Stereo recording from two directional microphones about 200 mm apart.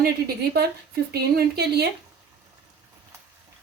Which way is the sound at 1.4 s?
50° right (ahead or behind).